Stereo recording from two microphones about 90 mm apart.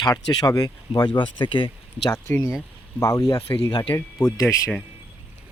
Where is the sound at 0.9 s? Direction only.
60° left (ahead or behind).